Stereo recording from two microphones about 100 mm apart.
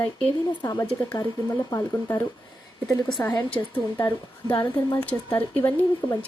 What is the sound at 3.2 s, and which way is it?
Speech, 20° left (ahead or behind).